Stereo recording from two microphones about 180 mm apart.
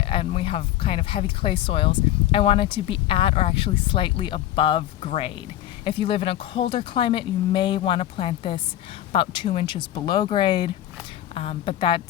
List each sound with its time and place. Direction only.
0.0 s a woman's voice: 30° left (ahead or behind)